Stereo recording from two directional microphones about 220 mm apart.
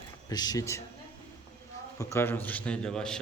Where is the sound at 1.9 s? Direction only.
10° left (ahead or behind).